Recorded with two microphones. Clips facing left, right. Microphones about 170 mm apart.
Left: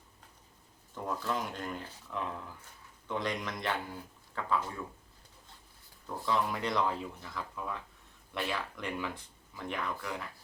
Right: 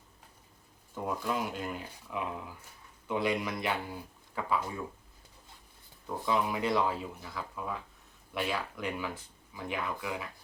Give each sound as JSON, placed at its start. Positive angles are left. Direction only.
{"t": 1.0, "sound": "speech", "side_deg": -10}
{"t": 6.1, "sound": "speech", "side_deg": -10}